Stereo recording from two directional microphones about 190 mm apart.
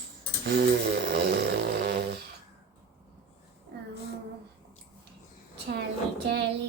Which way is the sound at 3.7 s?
60° right (ahead or behind).